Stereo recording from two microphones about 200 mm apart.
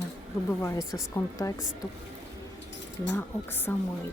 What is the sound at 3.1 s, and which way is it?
Speech, 10° left (ahead or behind).